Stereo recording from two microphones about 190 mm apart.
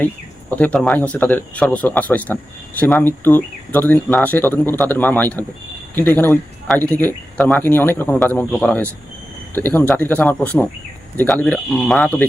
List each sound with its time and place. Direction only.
0.5 s speech: 5° left (ahead or behind)